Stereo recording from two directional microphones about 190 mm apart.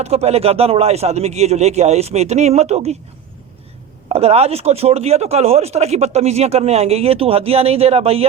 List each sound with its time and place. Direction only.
0.0 s speech: 35° right (ahead or behind)
4.1 s speech: 30° right (ahead or behind)